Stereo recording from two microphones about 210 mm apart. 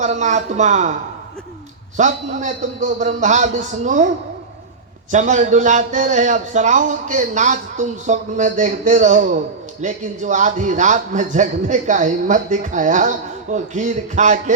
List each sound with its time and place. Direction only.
0.0 s a man's voice: 35° right (ahead or behind)
2.0 s a man's voice: 35° right (ahead or behind)
5.1 s a man's voice: 35° right (ahead or behind)